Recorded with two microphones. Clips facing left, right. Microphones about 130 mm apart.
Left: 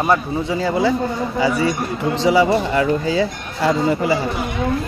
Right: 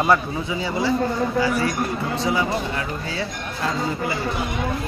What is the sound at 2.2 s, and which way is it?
Speech, 90° left.